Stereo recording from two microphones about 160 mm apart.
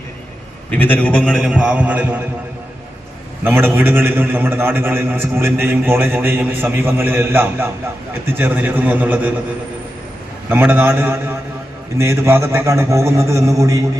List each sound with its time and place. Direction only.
0.7 s a man's voice: 10° left (ahead or behind); by 2.2 s 10° right (ahead or behind)
3.4 s a man's voice: 15° right (ahead or behind)
10.5 s a man's voice: 10° right (ahead or behind)